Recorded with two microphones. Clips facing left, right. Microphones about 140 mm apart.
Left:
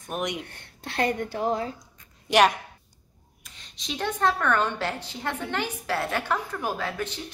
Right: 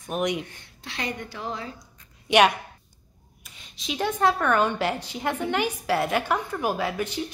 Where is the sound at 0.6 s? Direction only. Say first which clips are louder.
Left 7 dB; 55° left (ahead or behind).